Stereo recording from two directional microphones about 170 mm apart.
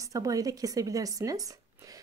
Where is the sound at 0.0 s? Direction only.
20° right (ahead or behind).